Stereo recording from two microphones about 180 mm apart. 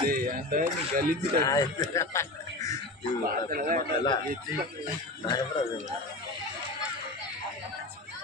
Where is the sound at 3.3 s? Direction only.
50° right (ahead or behind).